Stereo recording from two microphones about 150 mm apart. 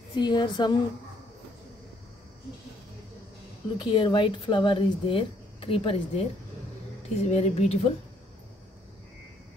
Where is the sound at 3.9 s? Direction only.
30° left (ahead or behind).